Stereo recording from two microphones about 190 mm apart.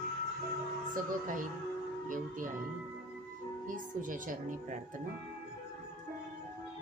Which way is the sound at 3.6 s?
45° right (ahead or behind).